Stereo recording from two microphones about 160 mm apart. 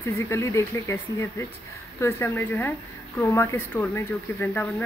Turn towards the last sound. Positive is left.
turn(degrees=10)  # may be behind; listen again after turning